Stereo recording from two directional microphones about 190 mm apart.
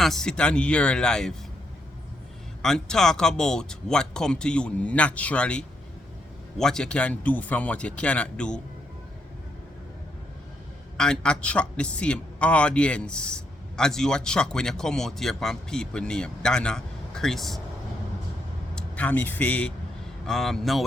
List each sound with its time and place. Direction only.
0.0 s a man's voice: centre (ahead or behind)
2.6 s a man's voice: 5° left (ahead or behind)
10.9 s a man's voice: 5° left (ahead or behind)
18.7 s a man's voice: 5° left (ahead or behind)